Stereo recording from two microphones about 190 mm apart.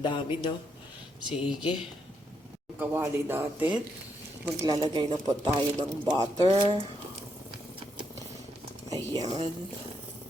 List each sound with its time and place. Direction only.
0.0 s speech: 25° left (ahead or behind)
1.3 s speech: 5° right (ahead or behind)
2.7 s speech: 10° right (ahead or behind)
9.1 s speech: 20° right (ahead or behind)